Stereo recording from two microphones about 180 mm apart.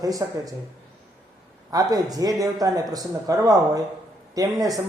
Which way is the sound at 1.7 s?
20° right (ahead or behind).